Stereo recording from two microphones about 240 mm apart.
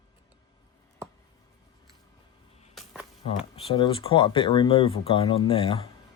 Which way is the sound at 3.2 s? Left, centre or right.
Left.